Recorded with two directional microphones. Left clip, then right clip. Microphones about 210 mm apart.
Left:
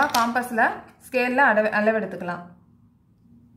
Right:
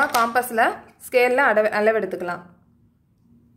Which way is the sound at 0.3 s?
50° right (ahead or behind).